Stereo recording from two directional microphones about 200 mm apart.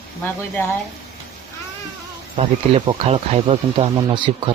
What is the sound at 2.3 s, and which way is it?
Speech, 30° right (ahead or behind).